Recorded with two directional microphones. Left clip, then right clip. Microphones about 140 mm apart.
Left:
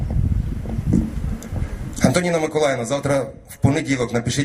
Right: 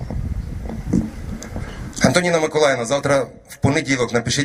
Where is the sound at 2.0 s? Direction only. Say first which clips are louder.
Right 3 dB; 35° right (ahead or behind).